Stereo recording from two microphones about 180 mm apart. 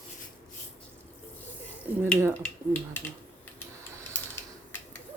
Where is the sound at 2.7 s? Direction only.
10° left (ahead or behind).